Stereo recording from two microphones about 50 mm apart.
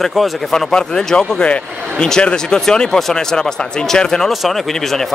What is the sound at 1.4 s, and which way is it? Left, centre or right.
Speech, left.